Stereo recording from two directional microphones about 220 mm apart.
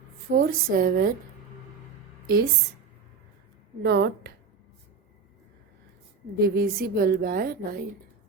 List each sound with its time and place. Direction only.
0.3 s a woman's voice: 40° right (ahead or behind)
2.2 s a woman's voice: 45° right (ahead or behind)
3.8 s a woman's voice: 50° right (ahead or behind)
6.4 s a woman's voice: 45° right (ahead or behind)